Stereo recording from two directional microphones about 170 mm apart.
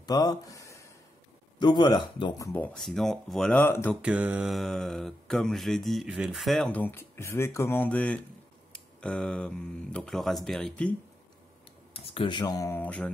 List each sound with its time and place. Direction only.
0.0 s speech: 20° left (ahead or behind)
3.9 s speech: 5° right (ahead or behind); by 8.2 s 10° left (ahead or behind)
8.7 s a sound: 5° left (ahead or behind)
9.9 s speech: centre (ahead or behind)
11.9 s speech: 35° left (ahead or behind); by 13.1 s 10° left (ahead or behind)